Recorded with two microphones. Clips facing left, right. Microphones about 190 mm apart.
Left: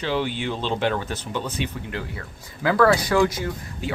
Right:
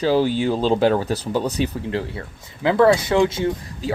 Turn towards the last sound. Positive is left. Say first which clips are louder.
# right 6 dB
turn(degrees=-25)  # may be behind; listen again after turning